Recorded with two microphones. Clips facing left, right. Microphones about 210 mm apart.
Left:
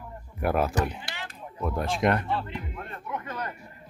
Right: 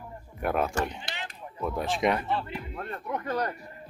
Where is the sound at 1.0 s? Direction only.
20° right (ahead or behind).